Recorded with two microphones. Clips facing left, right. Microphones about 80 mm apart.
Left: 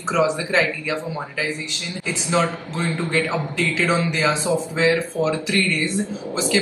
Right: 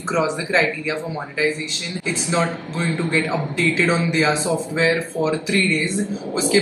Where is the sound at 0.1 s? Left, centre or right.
Right.